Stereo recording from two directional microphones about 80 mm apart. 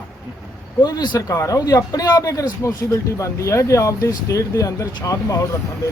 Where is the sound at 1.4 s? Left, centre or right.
Left.